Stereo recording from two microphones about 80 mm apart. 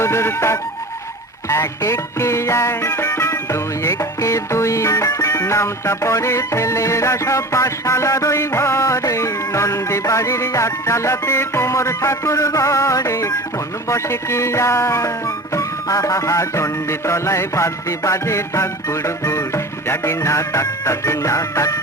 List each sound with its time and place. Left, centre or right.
0.0 s music: left